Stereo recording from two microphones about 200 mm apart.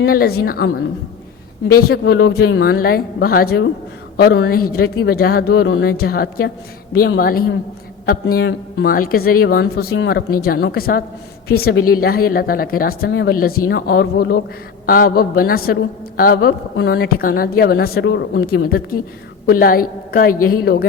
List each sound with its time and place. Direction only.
0.0 s a man's voice: 50° left (ahead or behind)
4.7 s a man's voice: 50° left (ahead or behind); by 5.8 s 65° left (ahead or behind)
5.8 s a man's voice: 50° left (ahead or behind)